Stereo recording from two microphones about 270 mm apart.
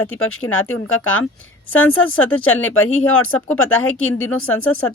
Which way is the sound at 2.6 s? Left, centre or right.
Left.